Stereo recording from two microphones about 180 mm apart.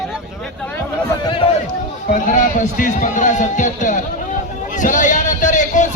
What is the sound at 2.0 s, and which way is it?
A man's voice, 45° left (ahead or behind).